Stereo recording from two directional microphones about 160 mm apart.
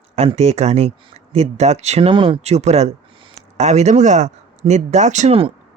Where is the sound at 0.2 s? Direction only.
40° right (ahead or behind).